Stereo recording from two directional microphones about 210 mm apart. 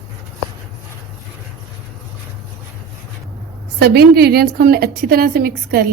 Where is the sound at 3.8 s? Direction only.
50° right (ahead or behind).